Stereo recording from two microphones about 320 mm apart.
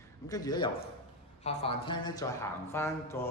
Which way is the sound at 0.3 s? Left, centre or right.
Centre.